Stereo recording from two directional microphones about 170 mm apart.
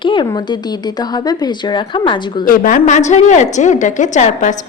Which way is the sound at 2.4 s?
55° left (ahead or behind).